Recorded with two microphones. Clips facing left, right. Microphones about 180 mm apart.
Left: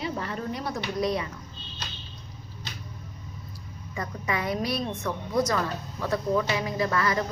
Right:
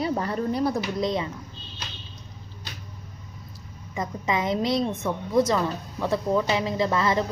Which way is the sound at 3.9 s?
20° right (ahead or behind).